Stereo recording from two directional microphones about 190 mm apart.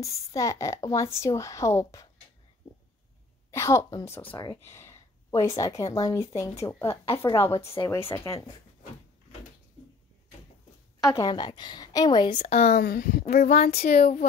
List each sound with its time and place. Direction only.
0.0 s a woman's voice: 15° left (ahead or behind)
3.5 s a woman's voice: 15° left (ahead or behind)
11.0 s a woman's voice: 15° left (ahead or behind)
12.4 s speech: 35° left (ahead or behind)
12.7 s speech: 55° left (ahead or behind)
13.5 s speech: 35° left (ahead or behind)